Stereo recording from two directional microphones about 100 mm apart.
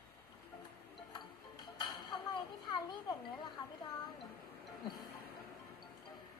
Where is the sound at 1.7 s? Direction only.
45° left (ahead or behind).